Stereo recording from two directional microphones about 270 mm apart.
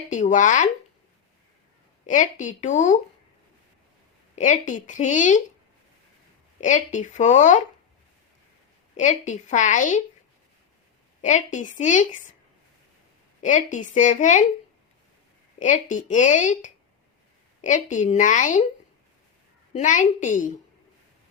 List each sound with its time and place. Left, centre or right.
0.1 s speech: left
2.0 s a woman's voice: left
4.4 s a woman's voice: left
6.6 s a woman's voice: left
9.0 s a woman's voice: left
11.2 s a woman's voice: left
13.4 s a woman's voice: left
15.5 s a woman's voice: left
19.7 s a woman's voice: left